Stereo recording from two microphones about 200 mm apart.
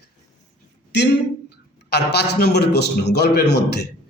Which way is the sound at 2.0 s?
55° left (ahead or behind).